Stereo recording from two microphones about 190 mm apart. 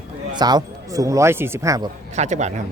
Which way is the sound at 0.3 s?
20° right (ahead or behind).